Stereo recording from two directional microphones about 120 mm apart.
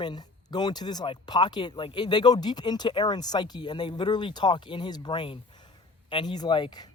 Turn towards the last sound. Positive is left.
turn(degrees=35)  # may be behind; listen again after turning